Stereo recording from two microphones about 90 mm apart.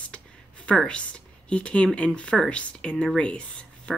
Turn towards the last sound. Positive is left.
turn(degrees=15)  # may be behind; listen again after turning